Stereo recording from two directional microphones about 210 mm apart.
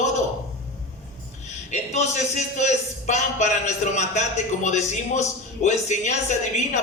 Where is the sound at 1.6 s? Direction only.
30° left (ahead or behind).